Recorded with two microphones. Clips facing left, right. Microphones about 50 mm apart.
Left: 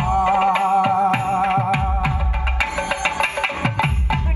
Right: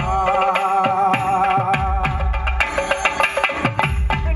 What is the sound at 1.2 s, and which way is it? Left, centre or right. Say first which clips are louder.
Music: right 2 dB; right.